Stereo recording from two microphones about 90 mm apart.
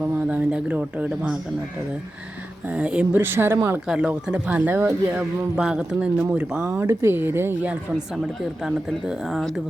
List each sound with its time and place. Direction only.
0.0 s speech: 15° right (ahead or behind)
2.6 s speech: 15° right (ahead or behind)
3.8 s speech: 10° right (ahead or behind)
5.1 s speech: 10° right (ahead or behind)
6.3 s speech: 25° right (ahead or behind)
7.7 s speech: 5° right (ahead or behind)